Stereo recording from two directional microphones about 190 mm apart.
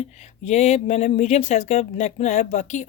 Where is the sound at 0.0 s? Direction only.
35° left (ahead or behind).